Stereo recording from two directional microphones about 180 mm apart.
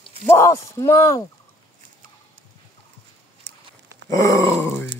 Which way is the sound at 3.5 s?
70° right (ahead or behind).